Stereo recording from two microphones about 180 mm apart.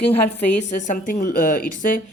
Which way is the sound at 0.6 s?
40° left (ahead or behind).